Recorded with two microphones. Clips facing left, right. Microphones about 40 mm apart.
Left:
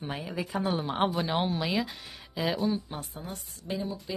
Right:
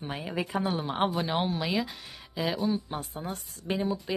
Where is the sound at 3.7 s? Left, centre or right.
Right.